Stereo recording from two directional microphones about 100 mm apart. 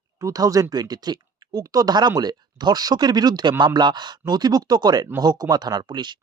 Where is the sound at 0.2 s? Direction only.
35° right (ahead or behind).